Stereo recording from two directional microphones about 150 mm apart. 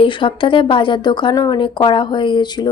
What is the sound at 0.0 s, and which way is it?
A woman's voice, 35° left (ahead or behind).